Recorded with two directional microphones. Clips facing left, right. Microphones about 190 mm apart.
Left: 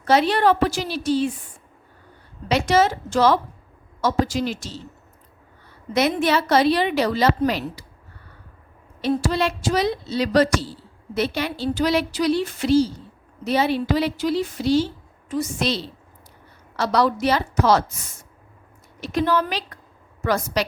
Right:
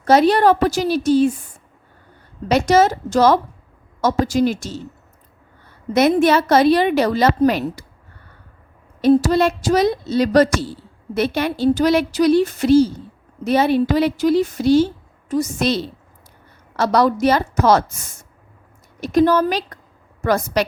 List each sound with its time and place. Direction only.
0.0 s a woman's voice: 40° right (ahead or behind)
2.5 s a woman's voice: 45° right (ahead or behind)
5.9 s a woman's voice: 45° right (ahead or behind)
9.0 s a woman's voice: 45° right (ahead or behind)
18.9 s a woman's voice: 45° right (ahead or behind)